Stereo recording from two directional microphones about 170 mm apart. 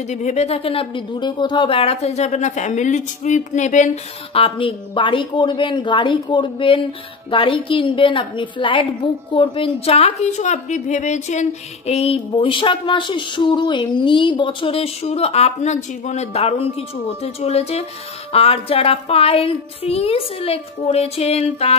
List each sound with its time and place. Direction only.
0.1 s speech: 40° left (ahead or behind)